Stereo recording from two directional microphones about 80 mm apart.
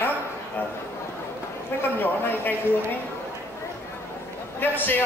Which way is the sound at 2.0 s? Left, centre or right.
Left.